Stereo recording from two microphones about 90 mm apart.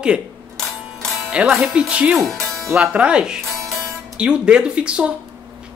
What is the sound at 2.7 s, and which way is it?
Speech, 15° right (ahead or behind).